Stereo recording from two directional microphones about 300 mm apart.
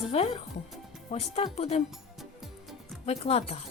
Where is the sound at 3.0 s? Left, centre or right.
Left.